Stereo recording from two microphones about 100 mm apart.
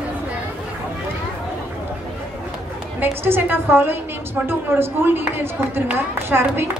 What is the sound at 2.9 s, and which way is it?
A woman's voice, 20° right (ahead or behind).